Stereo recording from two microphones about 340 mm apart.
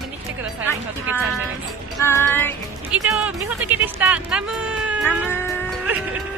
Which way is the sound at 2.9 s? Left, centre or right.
Centre.